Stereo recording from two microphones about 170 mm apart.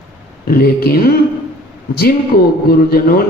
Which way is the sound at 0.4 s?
60° left (ahead or behind).